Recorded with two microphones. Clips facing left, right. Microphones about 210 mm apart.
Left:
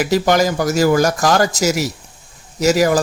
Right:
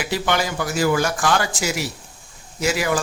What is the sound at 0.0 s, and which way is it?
Speech, 40° left (ahead or behind).